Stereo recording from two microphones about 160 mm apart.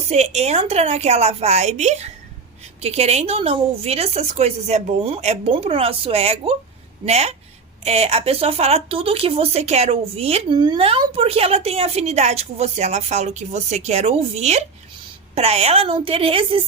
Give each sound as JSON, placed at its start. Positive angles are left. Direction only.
{"t": 0.1, "sound": "a woman's voice", "side_deg": -45}